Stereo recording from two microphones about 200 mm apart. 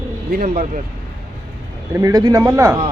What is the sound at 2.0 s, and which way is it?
Speech, 15° right (ahead or behind).